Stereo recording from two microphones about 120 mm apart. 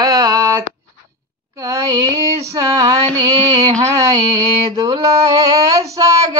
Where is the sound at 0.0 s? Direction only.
30° right (ahead or behind).